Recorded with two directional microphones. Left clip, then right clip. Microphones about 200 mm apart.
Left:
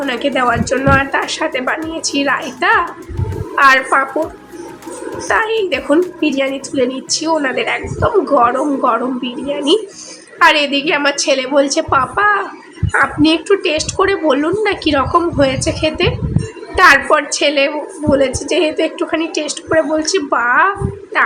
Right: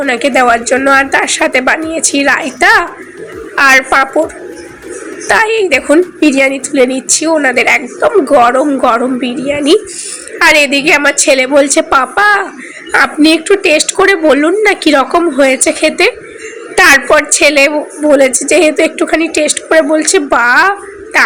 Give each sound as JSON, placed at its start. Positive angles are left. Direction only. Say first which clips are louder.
{"t": 0.0, "sound": "a woman's voice", "louder": "right 6 dB", "side_deg": -15}
{"t": 5.3, "sound": "a woman's voice", "louder": "right 6 dB", "side_deg": -20}